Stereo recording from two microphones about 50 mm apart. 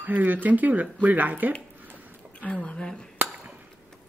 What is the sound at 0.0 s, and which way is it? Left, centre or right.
Speech, right.